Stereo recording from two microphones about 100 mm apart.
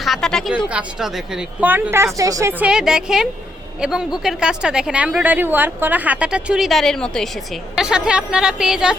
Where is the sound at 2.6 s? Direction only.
5° right (ahead or behind).